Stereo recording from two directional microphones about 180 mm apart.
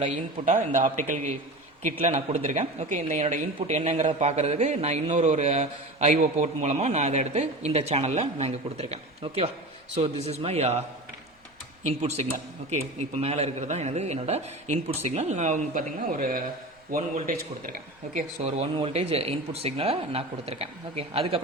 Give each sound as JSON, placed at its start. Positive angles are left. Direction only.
{"t": 0.4, "sound": "a man's voice", "side_deg": -45}
{"t": 13.0, "sound": "speech", "side_deg": -35}